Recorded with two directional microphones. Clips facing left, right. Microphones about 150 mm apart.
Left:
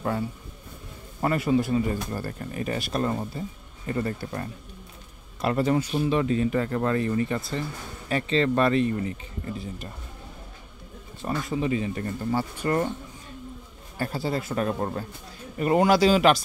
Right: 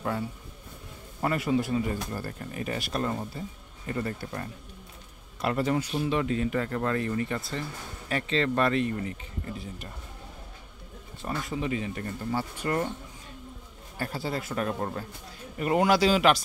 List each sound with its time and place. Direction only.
1.2 s speech: 35° left (ahead or behind)
11.2 s speech: 30° left (ahead or behind)
13.9 s speech: 35° left (ahead or behind)